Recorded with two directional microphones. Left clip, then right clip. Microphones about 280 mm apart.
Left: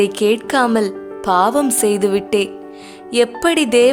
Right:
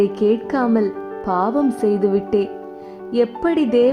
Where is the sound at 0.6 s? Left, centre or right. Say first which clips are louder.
Left 3 dB; left.